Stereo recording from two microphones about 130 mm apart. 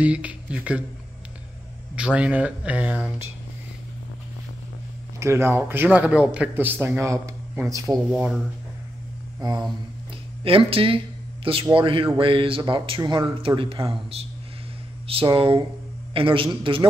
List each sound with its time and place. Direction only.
0.0 s a man's voice: 10° right (ahead or behind)
2.0 s a man's voice: 10° right (ahead or behind)
5.2 s a man's voice: 20° right (ahead or behind)
9.4 s mantra: 35° right (ahead or behind)
10.4 s speech: 45° right (ahead or behind)